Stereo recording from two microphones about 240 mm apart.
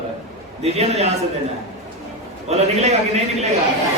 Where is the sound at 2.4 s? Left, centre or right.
Right.